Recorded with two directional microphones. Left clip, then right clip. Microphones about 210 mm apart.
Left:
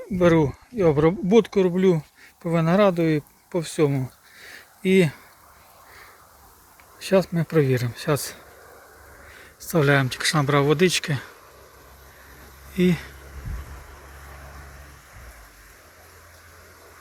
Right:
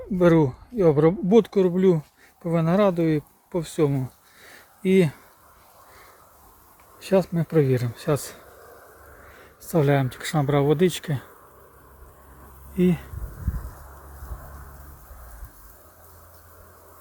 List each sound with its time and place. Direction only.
0.2 s speech: 25° right (ahead or behind)
2.0 s speech: 5° right (ahead or behind)
7.0 s speech: 10° right (ahead or behind)
12.7 s speech: 15° right (ahead or behind)